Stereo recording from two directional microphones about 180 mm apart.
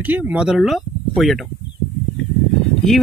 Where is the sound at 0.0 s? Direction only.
10° right (ahead or behind).